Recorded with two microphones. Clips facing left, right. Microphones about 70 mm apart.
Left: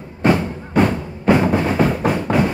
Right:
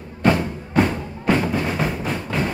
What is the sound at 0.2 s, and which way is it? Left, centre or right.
Music, left.